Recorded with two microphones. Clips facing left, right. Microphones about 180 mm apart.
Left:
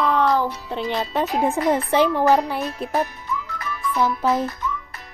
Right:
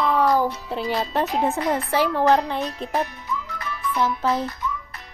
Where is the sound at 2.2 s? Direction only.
10° left (ahead or behind).